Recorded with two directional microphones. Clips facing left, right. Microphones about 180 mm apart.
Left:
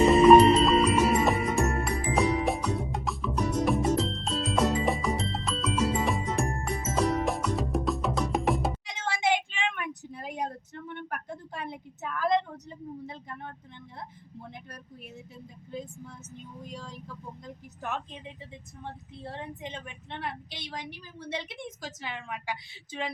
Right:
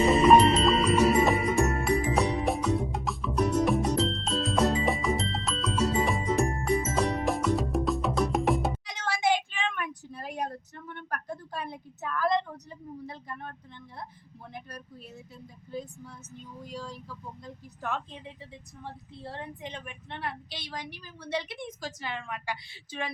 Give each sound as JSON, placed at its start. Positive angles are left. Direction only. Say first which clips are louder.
{"t": 0.1, "sound": "music", "louder": "left 3 dB", "side_deg": 0}
{"t": 9.0, "sound": "a sound", "louder": "right 1 dB", "side_deg": 25}
{"t": 15.7, "sound": "vehicle", "louder": "right 1 dB", "side_deg": 20}
{"t": 17.4, "sound": "a woman's voice", "louder": "right 1 dB", "side_deg": 20}
{"t": 19.2, "sound": "a woman's voice", "louder": "left 1 dB", "side_deg": 20}